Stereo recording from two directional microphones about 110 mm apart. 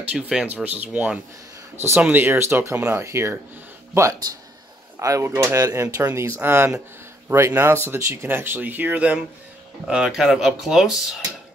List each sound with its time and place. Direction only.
0.1 s speech: 10° right (ahead or behind)